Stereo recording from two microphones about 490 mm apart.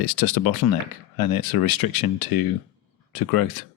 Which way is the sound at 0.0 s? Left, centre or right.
Left.